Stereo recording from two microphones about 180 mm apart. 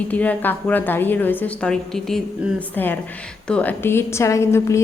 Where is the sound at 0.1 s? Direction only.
10° left (ahead or behind).